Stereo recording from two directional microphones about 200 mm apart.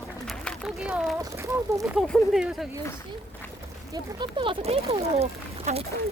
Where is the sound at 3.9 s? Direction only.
25° right (ahead or behind).